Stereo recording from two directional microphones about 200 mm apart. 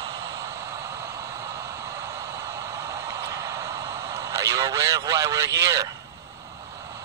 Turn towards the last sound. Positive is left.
turn(degrees=-15)  # may be behind; listen again after turning